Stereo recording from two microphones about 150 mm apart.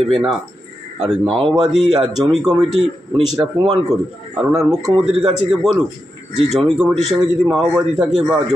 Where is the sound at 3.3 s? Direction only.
30° right (ahead or behind).